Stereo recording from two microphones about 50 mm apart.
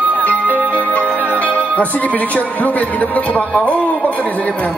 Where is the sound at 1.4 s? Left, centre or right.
Left.